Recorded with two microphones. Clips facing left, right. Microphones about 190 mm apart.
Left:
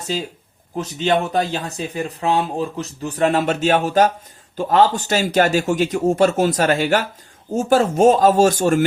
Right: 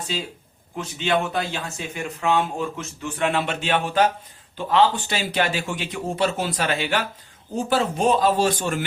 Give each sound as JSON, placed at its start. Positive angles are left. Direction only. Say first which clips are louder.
{"t": 0.8, "sound": "a man's voice", "louder": "left 4 dB", "side_deg": 40}